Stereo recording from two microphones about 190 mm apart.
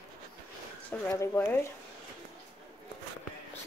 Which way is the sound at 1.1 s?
15° left (ahead or behind).